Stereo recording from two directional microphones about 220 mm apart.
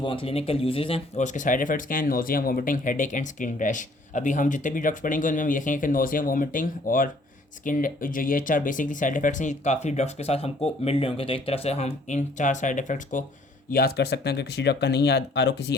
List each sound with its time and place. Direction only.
0.0 s speech: 25° left (ahead or behind); by 15.7 s 50° left (ahead or behind)